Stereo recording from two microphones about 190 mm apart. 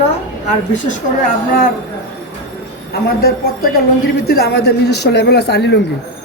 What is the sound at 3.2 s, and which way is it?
Speech, 55° left (ahead or behind).